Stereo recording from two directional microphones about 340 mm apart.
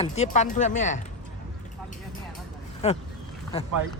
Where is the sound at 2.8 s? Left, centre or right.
Centre.